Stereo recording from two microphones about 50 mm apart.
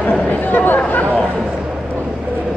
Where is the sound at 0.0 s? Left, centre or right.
Left.